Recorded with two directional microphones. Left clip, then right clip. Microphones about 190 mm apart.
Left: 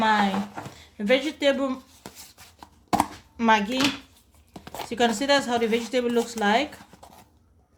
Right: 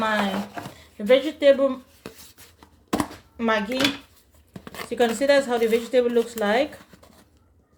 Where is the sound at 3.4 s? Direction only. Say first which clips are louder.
Left 3 dB; 20° left (ahead or behind).